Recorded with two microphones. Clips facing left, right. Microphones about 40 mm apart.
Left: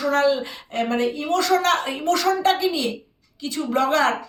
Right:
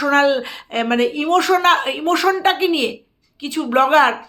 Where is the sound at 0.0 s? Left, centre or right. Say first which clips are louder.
Right 4 dB; right.